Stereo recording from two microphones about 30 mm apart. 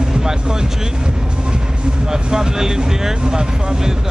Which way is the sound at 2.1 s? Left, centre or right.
Centre.